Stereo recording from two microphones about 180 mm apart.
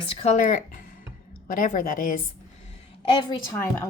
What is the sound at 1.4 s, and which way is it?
Speech, 50° left (ahead or behind).